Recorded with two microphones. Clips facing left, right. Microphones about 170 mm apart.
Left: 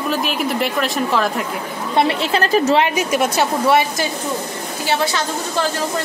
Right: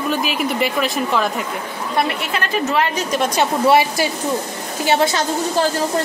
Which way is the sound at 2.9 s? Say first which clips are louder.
Left 2 dB; 10° left (ahead or behind).